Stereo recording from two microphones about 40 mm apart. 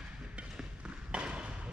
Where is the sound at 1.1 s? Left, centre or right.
Right.